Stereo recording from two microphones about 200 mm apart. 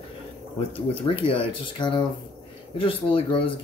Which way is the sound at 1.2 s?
25° left (ahead or behind).